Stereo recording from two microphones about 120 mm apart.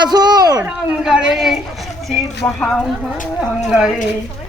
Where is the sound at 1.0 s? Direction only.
5° right (ahead or behind).